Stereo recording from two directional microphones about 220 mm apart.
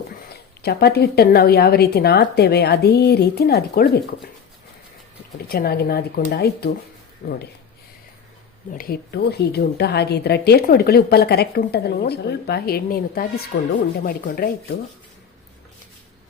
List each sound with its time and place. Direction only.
0.3 s a woman's voice: 45° left (ahead or behind)
5.5 s a woman's voice: 45° left (ahead or behind)
8.7 s a woman's voice: 40° left (ahead or behind)